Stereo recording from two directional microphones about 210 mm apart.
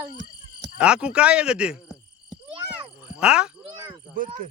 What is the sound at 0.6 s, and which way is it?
Speech, 5° right (ahead or behind).